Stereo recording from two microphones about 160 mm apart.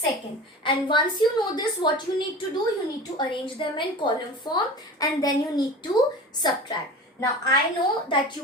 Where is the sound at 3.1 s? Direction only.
30° left (ahead or behind).